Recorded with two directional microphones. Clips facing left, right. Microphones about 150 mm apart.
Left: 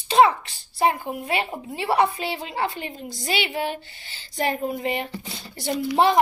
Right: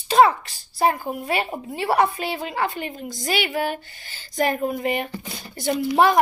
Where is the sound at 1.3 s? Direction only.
25° left (ahead or behind).